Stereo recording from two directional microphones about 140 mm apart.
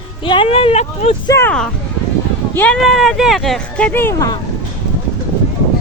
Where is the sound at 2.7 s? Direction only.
Centre (ahead or behind).